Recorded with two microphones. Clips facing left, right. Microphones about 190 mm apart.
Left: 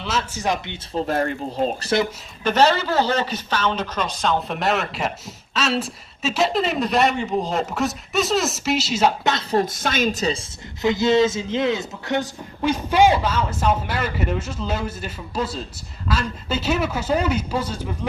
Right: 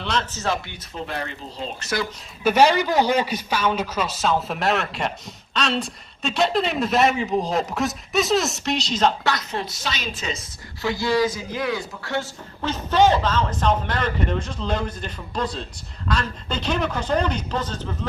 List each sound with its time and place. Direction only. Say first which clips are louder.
0.0 s speech: left 1 dB; 5° left (ahead or behind)
0.9 s a woman's voice: left 8 dB; 45° left (ahead or behind)
1.8 s speech: left 3 dB; 30° left (ahead or behind)
2.4 s speech: right 1 dB; 10° right (ahead or behind); by 9.1 s 5° left (ahead or behind)
9.2 s speech: left 3 dB; 25° left (ahead or behind)
9.6 s a woman's voice: left 8 dB; 50° left (ahead or behind)
10.8 s speech: left 4 dB; 20° left (ahead or behind)